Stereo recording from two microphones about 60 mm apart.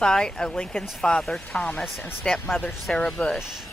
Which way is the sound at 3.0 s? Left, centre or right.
Centre.